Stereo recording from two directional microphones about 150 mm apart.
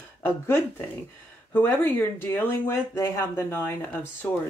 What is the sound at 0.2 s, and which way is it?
Speech, 15° left (ahead or behind).